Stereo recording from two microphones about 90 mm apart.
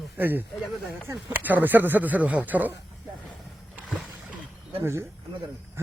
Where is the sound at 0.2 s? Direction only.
20° right (ahead or behind).